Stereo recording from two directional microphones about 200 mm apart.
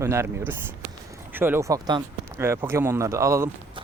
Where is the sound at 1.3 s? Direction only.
10° right (ahead or behind).